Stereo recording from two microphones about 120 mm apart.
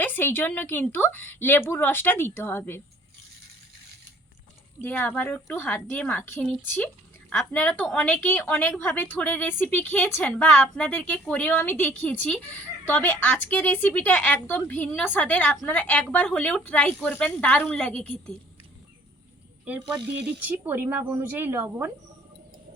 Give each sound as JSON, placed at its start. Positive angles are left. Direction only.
{"t": 0.0, "sound": "a woman's voice", "side_deg": 15}
{"t": 4.8, "sound": "a woman's voice", "side_deg": 15}
{"t": 19.6, "sound": "speech", "side_deg": -10}